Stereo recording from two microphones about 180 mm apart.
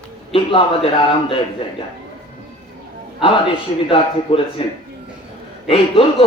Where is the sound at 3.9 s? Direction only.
30° left (ahead or behind).